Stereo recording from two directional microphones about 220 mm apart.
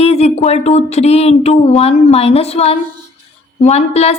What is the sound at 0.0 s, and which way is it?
A woman's voice, 30° left (ahead or behind).